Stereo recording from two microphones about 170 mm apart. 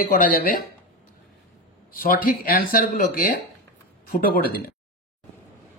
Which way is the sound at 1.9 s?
60° left (ahead or behind).